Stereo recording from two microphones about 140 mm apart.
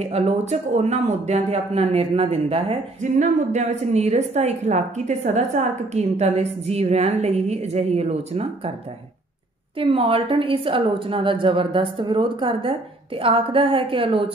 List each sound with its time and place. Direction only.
0.0 s speech: 50° right (ahead or behind)
9.8 s a woman's voice: 40° right (ahead or behind)